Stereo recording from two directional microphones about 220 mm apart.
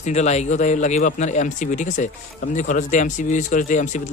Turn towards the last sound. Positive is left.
turn(degrees=35)  # may be behind; listen again after turning